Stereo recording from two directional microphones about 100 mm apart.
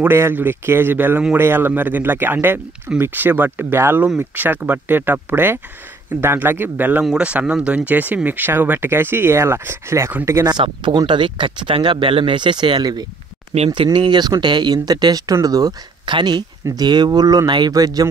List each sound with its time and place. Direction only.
0.0 s speech: 20° right (ahead or behind)
10.6 s speech: 55° right (ahead or behind); by 15.7 s 35° right (ahead or behind)
16.1 s speech: 50° right (ahead or behind)